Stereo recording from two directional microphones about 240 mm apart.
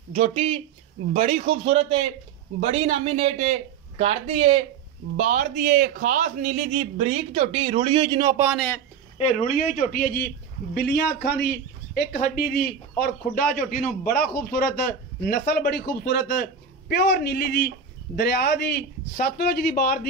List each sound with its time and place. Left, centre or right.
0.1 s speech: right
8.5 s speech: centre
9.2 s a man's voice: left